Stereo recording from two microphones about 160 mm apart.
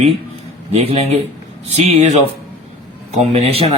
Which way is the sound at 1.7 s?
40° right (ahead or behind).